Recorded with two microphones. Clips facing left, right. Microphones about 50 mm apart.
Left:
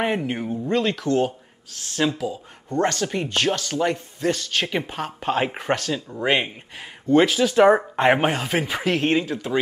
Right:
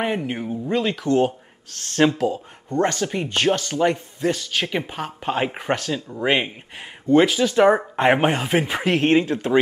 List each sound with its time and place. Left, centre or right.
0.0 s speech: centre
1.0 s chopping: right
2.0 s speech: right
2.8 s speech: centre
3.3 s chopping: right
4.2 s speech: centre; by 9.6 s right